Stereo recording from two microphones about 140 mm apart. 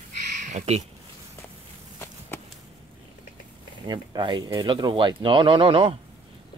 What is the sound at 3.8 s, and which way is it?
Speech, 30° right (ahead or behind).